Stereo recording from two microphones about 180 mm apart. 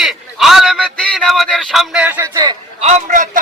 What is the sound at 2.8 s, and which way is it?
Speech, 40° right (ahead or behind).